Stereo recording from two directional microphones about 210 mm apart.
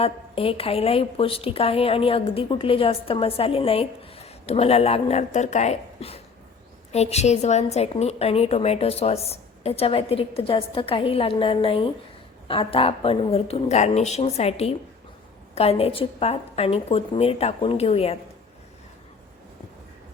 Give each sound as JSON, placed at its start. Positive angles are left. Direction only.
{"t": 0.0, "sound": "a woman's voice", "side_deg": 25}